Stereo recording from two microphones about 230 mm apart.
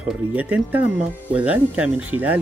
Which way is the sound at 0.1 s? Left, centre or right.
Centre.